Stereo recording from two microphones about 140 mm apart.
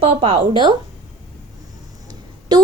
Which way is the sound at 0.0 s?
45° right (ahead or behind).